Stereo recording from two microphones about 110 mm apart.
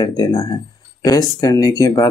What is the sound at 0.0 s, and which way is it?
Speech, 40° left (ahead or behind).